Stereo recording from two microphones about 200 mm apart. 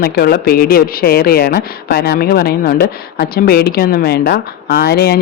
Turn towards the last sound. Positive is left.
turn(degrees=50)  # may be behind; listen again after turning